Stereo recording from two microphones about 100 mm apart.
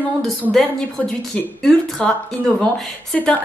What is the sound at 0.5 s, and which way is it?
A woman's voice, 5° left (ahead or behind).